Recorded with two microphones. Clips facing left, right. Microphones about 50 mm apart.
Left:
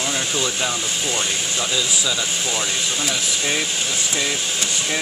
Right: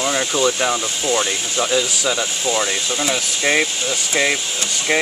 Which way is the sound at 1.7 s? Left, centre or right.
Right.